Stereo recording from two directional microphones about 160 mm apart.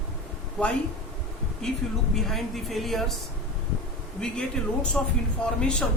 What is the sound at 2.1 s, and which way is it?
Speech, centre (ahead or behind).